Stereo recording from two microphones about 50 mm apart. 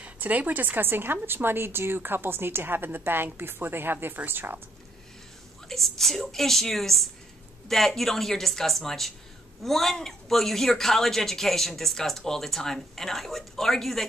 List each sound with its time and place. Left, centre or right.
0.0 s a woman's voice: right
5.7 s speech: centre